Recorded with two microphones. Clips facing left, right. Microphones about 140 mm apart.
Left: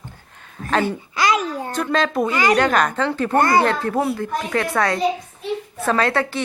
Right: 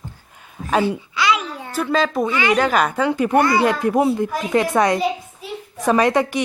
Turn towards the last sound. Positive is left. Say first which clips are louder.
# right 3 dB
turn(degrees=-15)  # may be behind; listen again after turning